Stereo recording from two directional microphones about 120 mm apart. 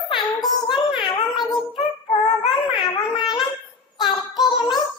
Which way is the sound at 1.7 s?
60° left (ahead or behind).